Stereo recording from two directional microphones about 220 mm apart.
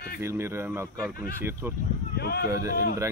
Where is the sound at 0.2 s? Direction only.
10° right (ahead or behind).